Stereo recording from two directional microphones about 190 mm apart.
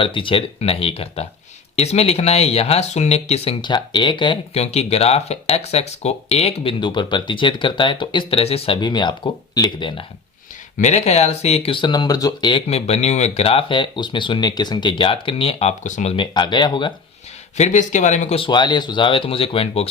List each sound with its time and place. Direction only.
0.0 s speech: 25° left (ahead or behind)
10.8 s speech: 35° left (ahead or behind)
16.1 s speech: 25° left (ahead or behind)
17.6 s speech: 40° left (ahead or behind)